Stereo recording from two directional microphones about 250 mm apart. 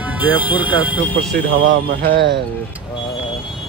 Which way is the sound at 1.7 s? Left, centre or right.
Right.